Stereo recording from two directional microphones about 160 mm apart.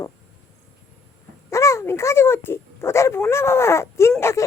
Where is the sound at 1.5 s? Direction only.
20° left (ahead or behind).